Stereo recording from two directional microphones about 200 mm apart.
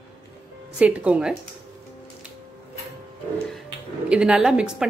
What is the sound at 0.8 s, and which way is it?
Speech, 5° right (ahead or behind).